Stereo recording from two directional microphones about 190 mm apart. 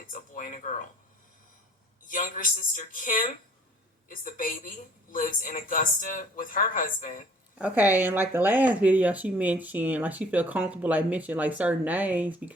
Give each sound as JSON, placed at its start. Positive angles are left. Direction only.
{"t": 0.1, "sound": "speech", "side_deg": 45}
{"t": 2.0, "sound": "a woman's voice", "side_deg": 45}
{"t": 7.6, "sound": "speech", "side_deg": -10}